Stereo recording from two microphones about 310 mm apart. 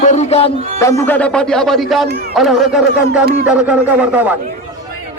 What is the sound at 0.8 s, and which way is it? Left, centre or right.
Music, centre.